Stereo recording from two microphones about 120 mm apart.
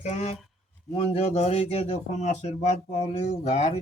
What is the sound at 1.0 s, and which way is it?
A man's voice, 60° left (ahead or behind).